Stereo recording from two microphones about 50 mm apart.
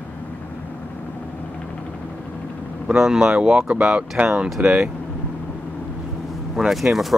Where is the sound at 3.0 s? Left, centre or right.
Centre.